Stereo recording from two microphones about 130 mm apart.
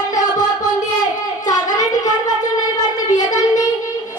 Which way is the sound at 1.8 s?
30° left (ahead or behind).